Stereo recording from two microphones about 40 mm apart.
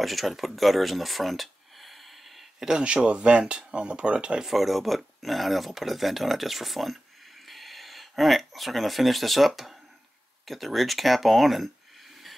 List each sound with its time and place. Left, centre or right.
0.0 s speech: centre
2.8 s speech: right
4.5 s speech: centre